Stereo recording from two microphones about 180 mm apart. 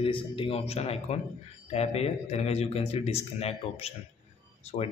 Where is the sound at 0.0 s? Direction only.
30° left (ahead or behind).